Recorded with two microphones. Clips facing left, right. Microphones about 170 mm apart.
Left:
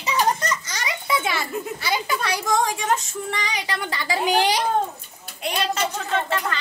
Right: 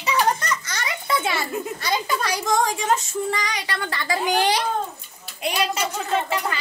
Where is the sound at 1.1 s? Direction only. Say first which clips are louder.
Right 1 dB; centre (ahead or behind).